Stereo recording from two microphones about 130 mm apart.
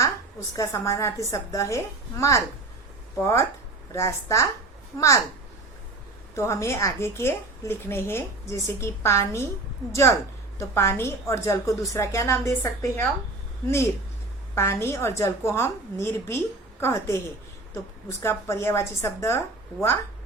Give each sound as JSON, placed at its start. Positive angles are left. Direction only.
{"t": 0.5, "sound": "a woman's voice", "side_deg": 25}
{"t": 6.3, "sound": "a woman's voice", "side_deg": 20}
{"t": 14.5, "sound": "a woman's voice", "side_deg": 20}